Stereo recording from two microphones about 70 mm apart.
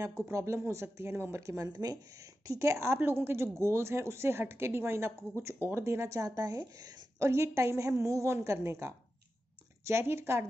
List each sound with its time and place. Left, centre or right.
0.2 s a woman's voice: right
6.3 s a woman's voice: right
7.2 s a woman's voice: right